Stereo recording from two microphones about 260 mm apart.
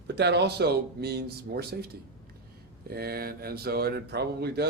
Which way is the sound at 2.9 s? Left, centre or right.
Right.